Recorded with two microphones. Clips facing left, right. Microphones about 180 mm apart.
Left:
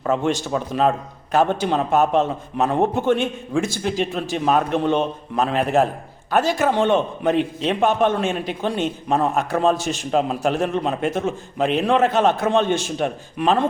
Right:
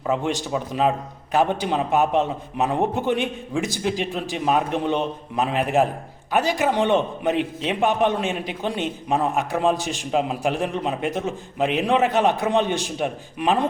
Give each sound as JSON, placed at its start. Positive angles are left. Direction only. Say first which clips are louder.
{"t": 0.0, "sound": "a man's voice", "louder": "left 3 dB", "side_deg": -15}